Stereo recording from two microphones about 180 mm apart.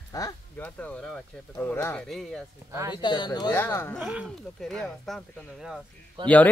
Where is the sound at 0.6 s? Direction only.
5° left (ahead or behind).